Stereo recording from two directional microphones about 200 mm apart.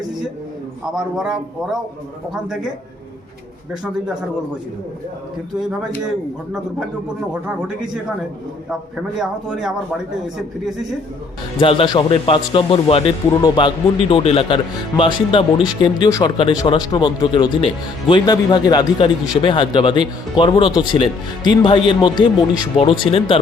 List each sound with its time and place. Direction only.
0.9 s a man's voice: 5° right (ahead or behind)
9.1 s a man's voice: centre (ahead or behind)
11.6 s a man's voice: 25° left (ahead or behind)